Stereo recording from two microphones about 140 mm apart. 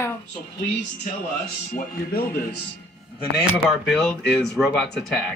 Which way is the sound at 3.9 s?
5° left (ahead or behind).